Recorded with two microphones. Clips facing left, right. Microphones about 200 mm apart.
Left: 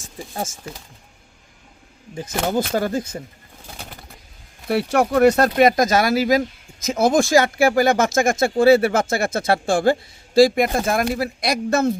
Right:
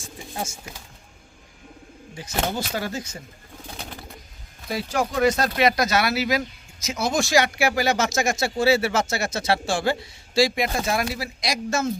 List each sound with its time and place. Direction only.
2.1 s speech: 50° left (ahead or behind)
4.7 s speech: 65° left (ahead or behind)